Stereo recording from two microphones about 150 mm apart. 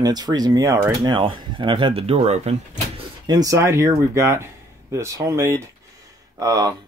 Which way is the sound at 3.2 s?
25° right (ahead or behind).